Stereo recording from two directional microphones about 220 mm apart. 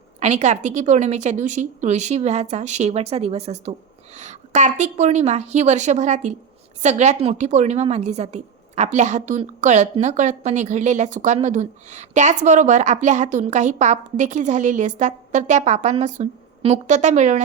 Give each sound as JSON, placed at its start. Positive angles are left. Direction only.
{"t": 0.2, "sound": "a woman's voice", "side_deg": -30}